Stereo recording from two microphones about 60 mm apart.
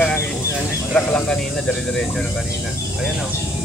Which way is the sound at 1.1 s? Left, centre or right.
Centre.